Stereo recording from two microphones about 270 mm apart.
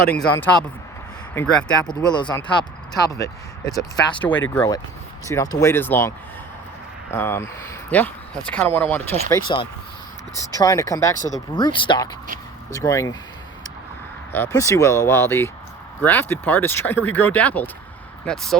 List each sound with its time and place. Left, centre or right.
0.1 s speech: centre
1.9 s speech: centre
9.3 s speech: centre
14.3 s speech: centre